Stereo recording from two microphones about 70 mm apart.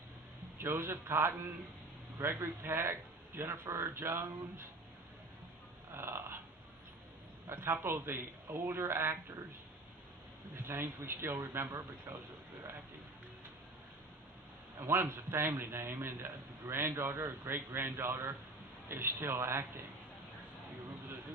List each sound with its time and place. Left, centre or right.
0.6 s a man's voice: right
5.9 s a sound: right
7.5 s a man's voice: right
10.7 s a man's voice: right
14.8 s a man's voice: right